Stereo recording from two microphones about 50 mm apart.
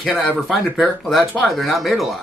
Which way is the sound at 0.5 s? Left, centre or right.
Centre.